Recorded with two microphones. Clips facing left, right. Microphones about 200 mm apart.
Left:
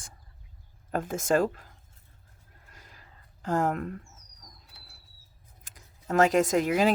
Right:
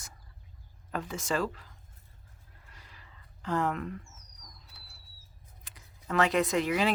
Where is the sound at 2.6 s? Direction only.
45° left (ahead or behind).